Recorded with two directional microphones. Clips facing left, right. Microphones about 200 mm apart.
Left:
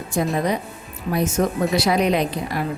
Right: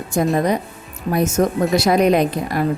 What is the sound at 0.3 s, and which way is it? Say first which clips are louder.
A woman's voice: right 4 dB; 45° right (ahead or behind).